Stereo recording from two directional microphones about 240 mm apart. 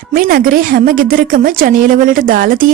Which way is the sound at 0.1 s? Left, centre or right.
Right.